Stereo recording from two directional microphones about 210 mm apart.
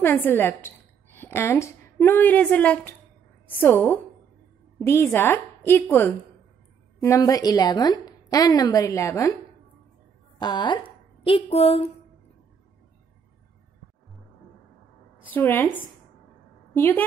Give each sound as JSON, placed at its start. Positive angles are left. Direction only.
{"t": 0.0, "sound": "a woman's voice", "side_deg": 10}
{"t": 10.4, "sound": "a woman's voice", "side_deg": 20}
{"t": 15.2, "sound": "a woman's voice", "side_deg": 10}